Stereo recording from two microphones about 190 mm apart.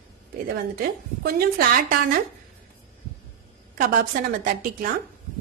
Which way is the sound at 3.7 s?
45° right (ahead or behind).